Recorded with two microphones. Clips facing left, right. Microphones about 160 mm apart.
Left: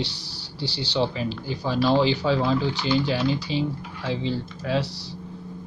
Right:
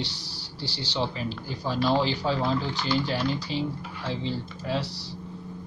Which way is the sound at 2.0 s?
75° left (ahead or behind).